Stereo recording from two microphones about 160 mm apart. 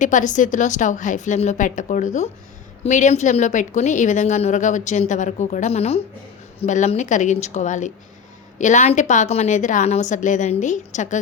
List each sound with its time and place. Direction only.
0.0 s a woman's voice: 50° left (ahead or behind)